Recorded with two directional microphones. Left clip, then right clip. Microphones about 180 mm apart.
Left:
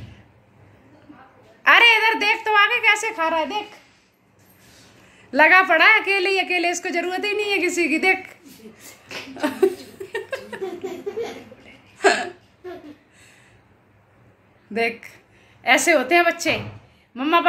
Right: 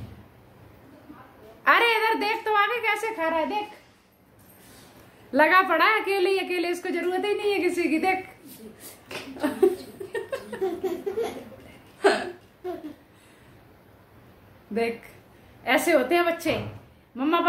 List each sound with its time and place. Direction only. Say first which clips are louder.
1.6 s a woman's voice: left 6 dB; 5° left (ahead or behind)
5.3 s a woman's voice: left 5 dB; 5° left (ahead or behind); by 8.2 s 30° left (ahead or behind)
9.4 s a sound: left 2 dB; 20° left (ahead or behind)
12.0 s hiccup: left 4 dB; 20° left (ahead or behind)
15.6 s a woman's voice: left 5 dB; 20° left (ahead or behind)